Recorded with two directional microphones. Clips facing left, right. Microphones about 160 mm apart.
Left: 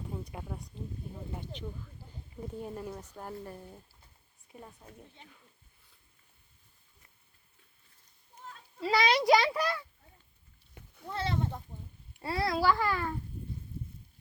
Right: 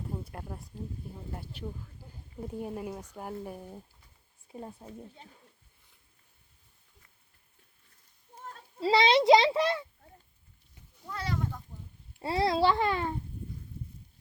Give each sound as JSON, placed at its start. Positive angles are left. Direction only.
{"t": 0.1, "sound": "a sound", "side_deg": 0}
{"t": 1.5, "sound": "speech", "side_deg": -10}
{"t": 4.5, "sound": "a child's voice", "side_deg": -30}
{"t": 8.4, "sound": "a sound", "side_deg": -40}
{"t": 8.8, "sound": "a child's voice", "side_deg": -25}
{"t": 10.8, "sound": "goat", "side_deg": 60}
{"t": 11.1, "sound": "sheep", "side_deg": 25}
{"t": 12.2, "sound": "a child's voice", "side_deg": -25}